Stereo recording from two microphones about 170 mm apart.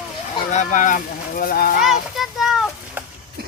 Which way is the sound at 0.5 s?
50° left (ahead or behind).